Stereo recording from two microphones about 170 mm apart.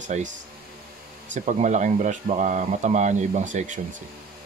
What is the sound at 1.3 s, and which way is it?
Speech, 45° right (ahead or behind).